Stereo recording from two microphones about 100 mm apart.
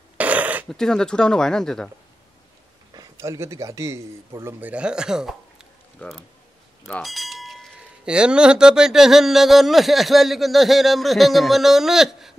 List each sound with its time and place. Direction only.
0.2 s a sound: 15° right (ahead or behind)
0.7 s speech: 5° left (ahead or behind)
2.9 s speech: 35° right (ahead or behind); by 5.7 s 5° right (ahead or behind)
6.0 s speech: 10° left (ahead or behind)
7.0 s wind chime: centre (ahead or behind)
8.1 s speech: 10° right (ahead or behind)